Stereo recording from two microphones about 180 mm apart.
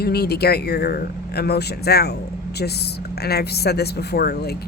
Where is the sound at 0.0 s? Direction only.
60° left (ahead or behind).